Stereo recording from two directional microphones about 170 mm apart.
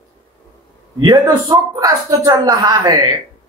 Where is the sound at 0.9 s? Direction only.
25° right (ahead or behind).